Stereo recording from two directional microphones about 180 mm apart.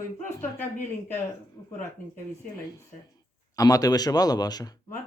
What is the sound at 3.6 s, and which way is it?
Speech, 20° left (ahead or behind).